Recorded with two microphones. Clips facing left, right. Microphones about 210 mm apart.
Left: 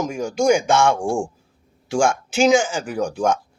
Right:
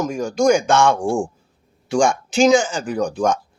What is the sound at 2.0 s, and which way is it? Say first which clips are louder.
Speech: right 2 dB; 10° left (ahead or behind).